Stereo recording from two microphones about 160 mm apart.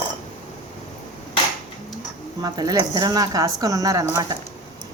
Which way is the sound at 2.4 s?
25° right (ahead or behind).